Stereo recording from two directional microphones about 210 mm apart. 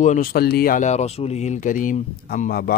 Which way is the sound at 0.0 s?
40° left (ahead or behind).